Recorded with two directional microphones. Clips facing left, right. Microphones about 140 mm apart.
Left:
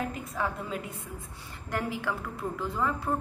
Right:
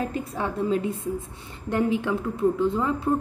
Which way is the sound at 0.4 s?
25° right (ahead or behind).